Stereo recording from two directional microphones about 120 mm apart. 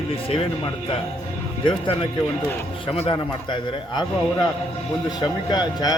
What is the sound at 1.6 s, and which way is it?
Speech, 45° left (ahead or behind).